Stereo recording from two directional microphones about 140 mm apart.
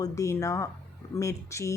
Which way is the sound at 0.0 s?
20° left (ahead or behind).